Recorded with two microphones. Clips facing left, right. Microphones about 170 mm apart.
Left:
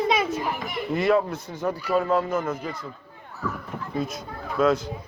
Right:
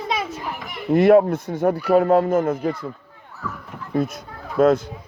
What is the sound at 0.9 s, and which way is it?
Speech, 55° right (ahead or behind).